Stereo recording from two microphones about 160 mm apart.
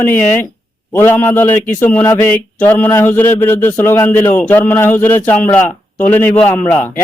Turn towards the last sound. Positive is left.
turn(degrees=15)  # may be behind; listen again after turning